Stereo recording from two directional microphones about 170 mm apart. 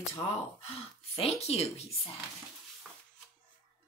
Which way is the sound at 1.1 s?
35° left (ahead or behind).